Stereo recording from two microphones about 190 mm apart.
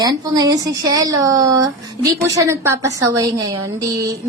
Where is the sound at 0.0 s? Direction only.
20° right (ahead or behind).